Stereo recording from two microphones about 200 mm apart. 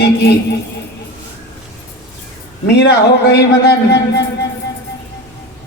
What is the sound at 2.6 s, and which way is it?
A woman's voice, 55° left (ahead or behind).